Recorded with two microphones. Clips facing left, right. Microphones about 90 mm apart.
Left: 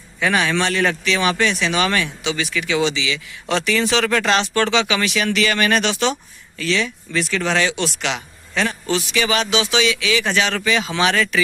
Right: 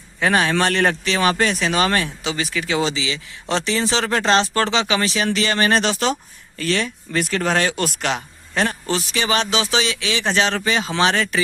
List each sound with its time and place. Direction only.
0.2 s speech: 35° right (ahead or behind)